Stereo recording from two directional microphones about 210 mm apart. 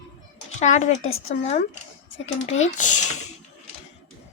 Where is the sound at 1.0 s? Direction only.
75° left (ahead or behind).